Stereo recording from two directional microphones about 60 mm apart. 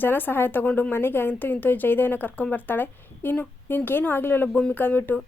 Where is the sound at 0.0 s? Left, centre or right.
Left.